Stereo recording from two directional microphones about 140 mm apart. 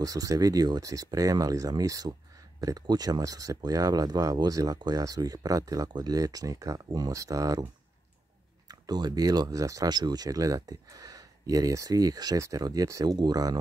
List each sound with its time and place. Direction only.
0.0 s speech: 25° right (ahead or behind)
8.6 s speech: 30° right (ahead or behind)